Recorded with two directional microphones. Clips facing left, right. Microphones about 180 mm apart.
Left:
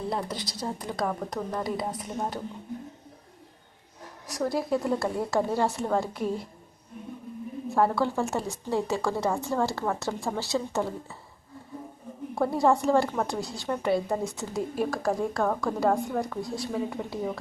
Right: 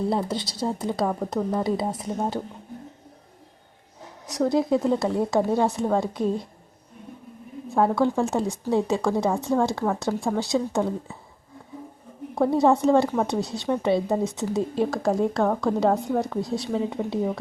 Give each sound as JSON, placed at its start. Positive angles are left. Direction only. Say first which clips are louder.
{"t": 0.1, "sound": "speech", "louder": "right 6 dB", "side_deg": -25}
{"t": 4.4, "sound": "speech", "louder": "right 6 dB", "side_deg": -20}
{"t": 7.8, "sound": "speech", "louder": "right 4 dB", "side_deg": -15}
{"t": 12.3, "sound": "speech", "louder": "right 4 dB", "side_deg": -20}